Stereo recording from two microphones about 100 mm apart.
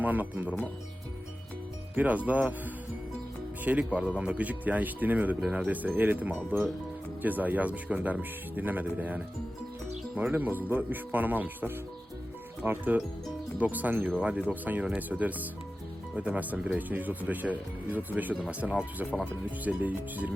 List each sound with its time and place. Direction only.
0.0 s speech: 15° right (ahead or behind)
2.0 s speech: 15° right (ahead or behind)
3.6 s speech: 15° right (ahead or behind)